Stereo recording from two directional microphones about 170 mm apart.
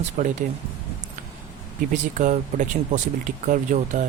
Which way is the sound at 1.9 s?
45° right (ahead or behind).